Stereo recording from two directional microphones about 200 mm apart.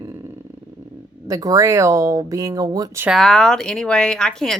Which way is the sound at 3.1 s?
Centre (ahead or behind).